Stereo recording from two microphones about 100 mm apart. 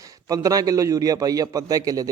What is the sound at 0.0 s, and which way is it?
Speech, 35° right (ahead or behind).